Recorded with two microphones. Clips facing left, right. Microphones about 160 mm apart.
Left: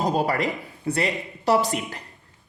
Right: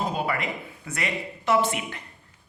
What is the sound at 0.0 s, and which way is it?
A woman's voice, 40° left (ahead or behind).